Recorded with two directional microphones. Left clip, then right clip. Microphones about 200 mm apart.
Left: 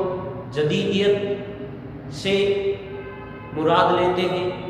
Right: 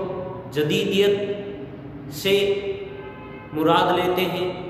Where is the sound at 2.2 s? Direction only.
60° right (ahead or behind).